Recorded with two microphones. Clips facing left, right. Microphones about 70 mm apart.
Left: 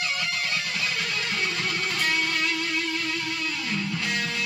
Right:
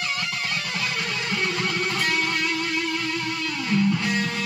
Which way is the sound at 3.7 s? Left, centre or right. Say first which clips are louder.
Right 9 dB; centre.